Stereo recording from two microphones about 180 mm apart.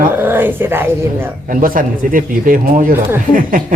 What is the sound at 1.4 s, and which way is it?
Speech, 50° right (ahead or behind).